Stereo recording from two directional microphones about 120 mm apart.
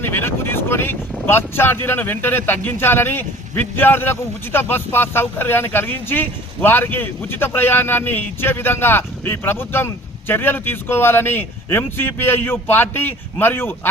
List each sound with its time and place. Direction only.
0.0 s speech: 20° left (ahead or behind)